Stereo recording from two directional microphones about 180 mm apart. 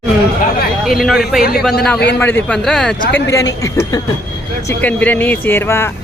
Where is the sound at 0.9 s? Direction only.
Centre (ahead or behind).